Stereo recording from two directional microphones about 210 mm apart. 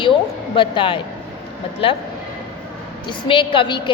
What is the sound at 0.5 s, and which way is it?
A woman's voice, 25° left (ahead or behind).